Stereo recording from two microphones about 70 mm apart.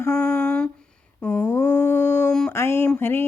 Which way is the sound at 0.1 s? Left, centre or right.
Centre.